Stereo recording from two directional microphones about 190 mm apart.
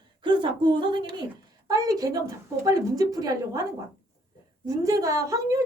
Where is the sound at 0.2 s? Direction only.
25° right (ahead or behind).